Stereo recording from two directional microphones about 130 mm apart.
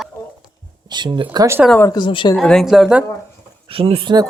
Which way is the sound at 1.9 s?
35° left (ahead or behind).